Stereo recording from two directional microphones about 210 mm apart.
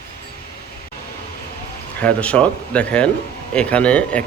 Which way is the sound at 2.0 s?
5° left (ahead or behind).